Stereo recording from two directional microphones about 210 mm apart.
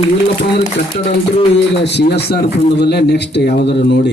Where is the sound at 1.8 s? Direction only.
55° left (ahead or behind).